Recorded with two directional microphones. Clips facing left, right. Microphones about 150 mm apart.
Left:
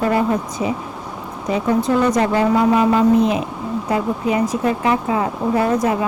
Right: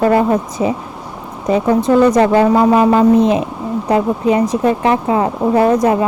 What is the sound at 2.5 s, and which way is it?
Speech, 40° right (ahead or behind).